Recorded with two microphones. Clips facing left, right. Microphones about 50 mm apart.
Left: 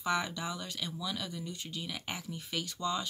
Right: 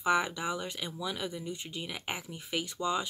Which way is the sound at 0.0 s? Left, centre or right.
Centre.